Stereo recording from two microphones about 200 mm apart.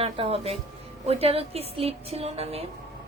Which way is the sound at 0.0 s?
30° right (ahead or behind).